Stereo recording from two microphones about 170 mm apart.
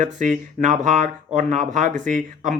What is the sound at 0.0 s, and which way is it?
Speech, 45° right (ahead or behind).